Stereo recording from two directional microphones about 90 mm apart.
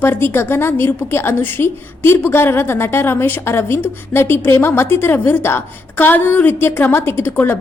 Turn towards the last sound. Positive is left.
turn(degrees=25)  # may be behind; listen again after turning